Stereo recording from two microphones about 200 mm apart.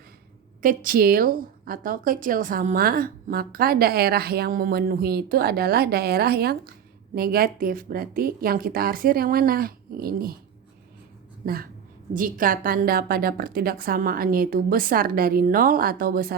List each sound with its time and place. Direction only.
0.6 s a woman's voice: 45° right (ahead or behind)
11.4 s a woman's voice: 50° right (ahead or behind)